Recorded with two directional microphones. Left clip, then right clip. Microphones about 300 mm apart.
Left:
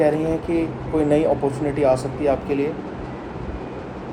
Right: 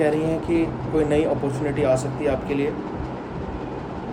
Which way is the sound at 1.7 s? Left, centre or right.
Centre.